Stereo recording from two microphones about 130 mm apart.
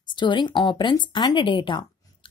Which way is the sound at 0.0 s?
35° left (ahead or behind).